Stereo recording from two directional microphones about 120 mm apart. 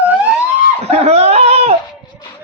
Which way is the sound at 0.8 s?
60° right (ahead or behind).